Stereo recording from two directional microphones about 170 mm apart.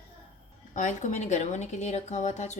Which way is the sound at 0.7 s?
45° left (ahead or behind).